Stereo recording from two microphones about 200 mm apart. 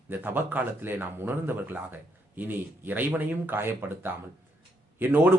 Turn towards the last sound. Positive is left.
turn(degrees=-10)  # may be behind; listen again after turning